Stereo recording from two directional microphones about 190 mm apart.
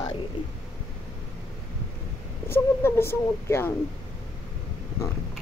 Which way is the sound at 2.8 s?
15° left (ahead or behind).